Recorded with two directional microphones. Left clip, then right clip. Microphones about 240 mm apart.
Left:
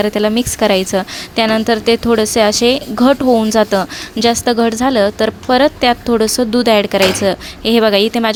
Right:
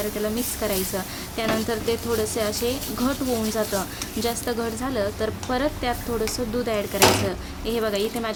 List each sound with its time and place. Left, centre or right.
0.0 s a woman's voice: left